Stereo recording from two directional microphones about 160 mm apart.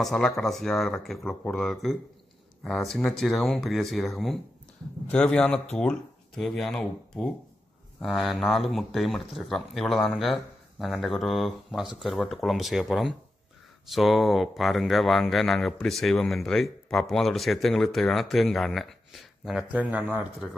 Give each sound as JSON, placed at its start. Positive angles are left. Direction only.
{"t": 0.0, "sound": "speech", "side_deg": 0}